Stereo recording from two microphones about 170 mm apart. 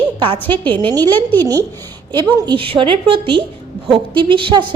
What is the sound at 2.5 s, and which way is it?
A woman's voice, 30° right (ahead or behind).